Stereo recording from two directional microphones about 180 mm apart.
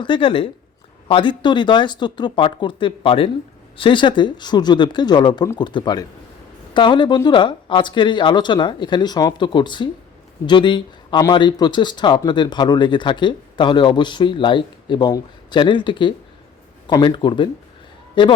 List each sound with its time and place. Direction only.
0.0 s speech: 30° left (ahead or behind)